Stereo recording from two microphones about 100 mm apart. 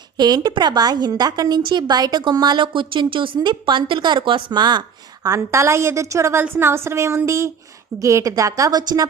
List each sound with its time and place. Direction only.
0.2 s a woman's voice: 45° right (ahead or behind)
5.2 s a woman's voice: 30° right (ahead or behind)